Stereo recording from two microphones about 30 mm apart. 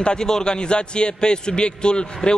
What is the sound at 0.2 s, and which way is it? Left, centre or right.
A man's voice, left.